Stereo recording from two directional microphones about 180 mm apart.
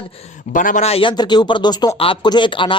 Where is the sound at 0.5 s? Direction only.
45° left (ahead or behind).